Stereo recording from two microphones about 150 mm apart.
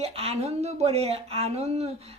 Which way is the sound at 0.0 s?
40° right (ahead or behind).